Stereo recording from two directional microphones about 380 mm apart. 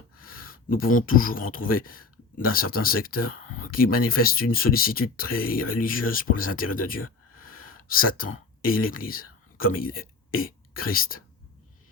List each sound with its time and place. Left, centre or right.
0.2 s speech: left